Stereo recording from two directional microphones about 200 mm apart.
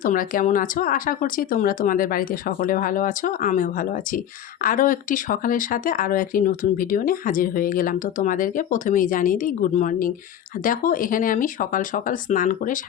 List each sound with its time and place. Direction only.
0.0 s speech: 45° left (ahead or behind)